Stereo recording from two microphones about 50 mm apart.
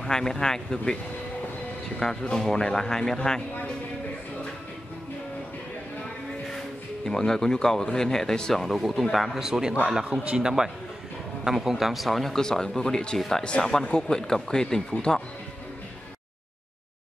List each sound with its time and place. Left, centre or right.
0.0 s speech: centre
2.0 s speech: centre
7.1 s speech: centre